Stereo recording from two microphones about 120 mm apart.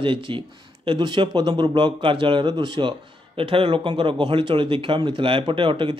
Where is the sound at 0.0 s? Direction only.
45° right (ahead or behind).